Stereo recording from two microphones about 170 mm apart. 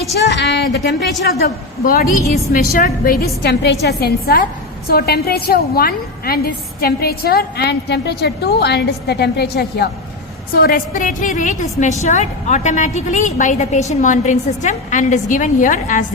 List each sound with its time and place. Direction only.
0.3 s a woman's voice: 90° left
1.8 s a woman's voice: 55° left (ahead or behind)
3.4 s a woman's voice: 75° left (ahead or behind)
10.5 s a woman's voice: 60° left (ahead or behind)